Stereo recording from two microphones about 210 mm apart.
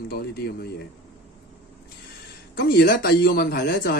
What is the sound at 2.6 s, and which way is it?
Speech, 45° left (ahead or behind).